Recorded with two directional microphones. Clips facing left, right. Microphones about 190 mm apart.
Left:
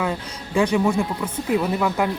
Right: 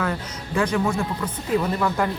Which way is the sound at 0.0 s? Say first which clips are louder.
Left 1 dB; 15° left (ahead or behind).